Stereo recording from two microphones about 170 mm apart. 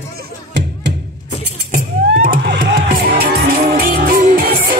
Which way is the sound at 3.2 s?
70° right (ahead or behind).